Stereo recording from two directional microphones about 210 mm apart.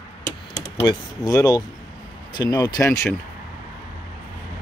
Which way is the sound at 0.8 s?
20° left (ahead or behind).